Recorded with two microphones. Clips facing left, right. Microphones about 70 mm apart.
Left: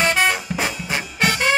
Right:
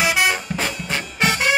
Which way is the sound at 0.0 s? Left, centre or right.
Centre.